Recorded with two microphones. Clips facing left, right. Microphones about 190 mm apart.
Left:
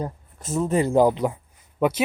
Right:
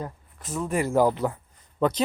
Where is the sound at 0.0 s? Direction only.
25° left (ahead or behind).